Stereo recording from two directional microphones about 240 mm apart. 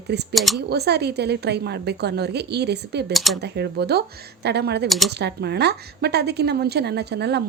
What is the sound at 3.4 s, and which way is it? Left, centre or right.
A woman's voice, right.